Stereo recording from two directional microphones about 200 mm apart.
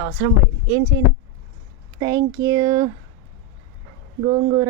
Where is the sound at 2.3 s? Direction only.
20° right (ahead or behind).